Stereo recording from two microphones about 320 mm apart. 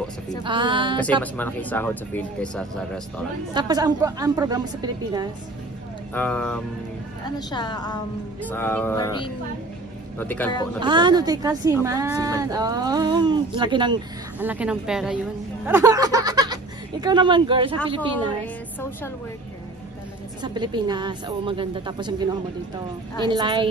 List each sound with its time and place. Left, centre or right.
0.4 s speech: centre
1.2 s speech: centre
3.5 s speech: centre
6.1 s speech: centre
10.8 s speech: centre
15.6 s a sound: centre
17.0 s speech: centre
18.3 s speech: centre
20.4 s speech: centre